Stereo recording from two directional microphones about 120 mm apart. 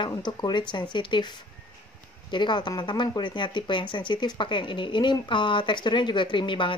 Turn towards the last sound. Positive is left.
turn(degrees=45)  # may be behind; listen again after turning